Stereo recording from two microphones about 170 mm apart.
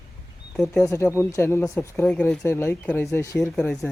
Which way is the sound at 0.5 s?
Centre (ahead or behind).